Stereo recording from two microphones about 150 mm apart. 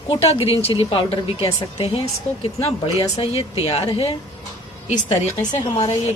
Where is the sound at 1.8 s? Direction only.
40° left (ahead or behind).